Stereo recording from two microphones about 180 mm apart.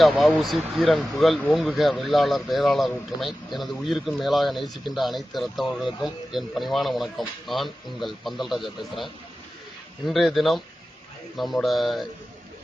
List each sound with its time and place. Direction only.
0.0 s speech: centre (ahead or behind)
10.1 s speech: centre (ahead or behind)